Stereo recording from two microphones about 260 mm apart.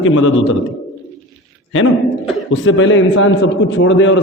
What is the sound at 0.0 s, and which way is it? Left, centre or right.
Speech, left.